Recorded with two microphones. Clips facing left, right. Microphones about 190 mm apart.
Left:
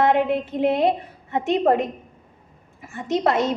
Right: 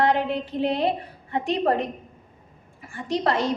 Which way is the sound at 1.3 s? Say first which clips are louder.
Left 4 dB; 25° left (ahead or behind).